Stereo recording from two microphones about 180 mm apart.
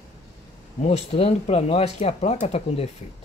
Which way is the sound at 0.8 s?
35° left (ahead or behind).